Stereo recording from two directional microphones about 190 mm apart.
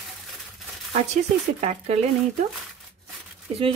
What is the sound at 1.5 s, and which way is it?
Speech, 35° right (ahead or behind).